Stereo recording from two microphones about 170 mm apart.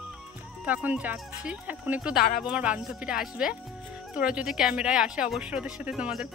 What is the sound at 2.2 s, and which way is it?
Speech, 60° left (ahead or behind).